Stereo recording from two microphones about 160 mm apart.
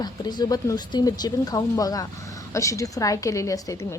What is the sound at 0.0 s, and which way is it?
A woman's voice, 25° left (ahead or behind).